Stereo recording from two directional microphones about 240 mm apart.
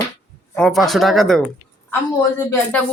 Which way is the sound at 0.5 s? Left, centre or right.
Centre.